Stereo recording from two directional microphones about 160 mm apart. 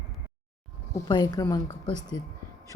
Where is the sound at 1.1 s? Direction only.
25° left (ahead or behind).